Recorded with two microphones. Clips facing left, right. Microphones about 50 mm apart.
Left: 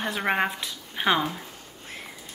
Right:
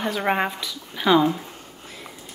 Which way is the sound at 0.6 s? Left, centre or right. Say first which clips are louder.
Right 2 dB; left.